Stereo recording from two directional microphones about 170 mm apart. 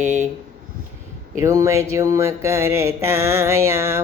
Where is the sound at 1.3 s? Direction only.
15° right (ahead or behind).